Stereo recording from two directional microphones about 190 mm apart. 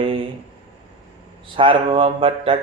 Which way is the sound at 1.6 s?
30° right (ahead or behind).